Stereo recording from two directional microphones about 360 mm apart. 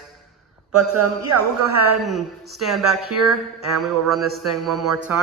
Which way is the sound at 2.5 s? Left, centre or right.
Centre.